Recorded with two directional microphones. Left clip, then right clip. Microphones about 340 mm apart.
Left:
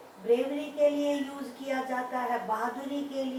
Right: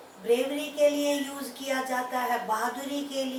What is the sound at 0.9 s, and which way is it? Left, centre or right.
Speech, left.